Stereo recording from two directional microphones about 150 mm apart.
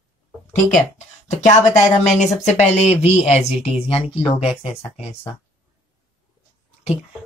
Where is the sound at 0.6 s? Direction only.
55° left (ahead or behind).